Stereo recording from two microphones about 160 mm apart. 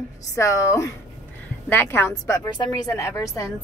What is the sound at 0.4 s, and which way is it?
A woman's voice, 20° left (ahead or behind).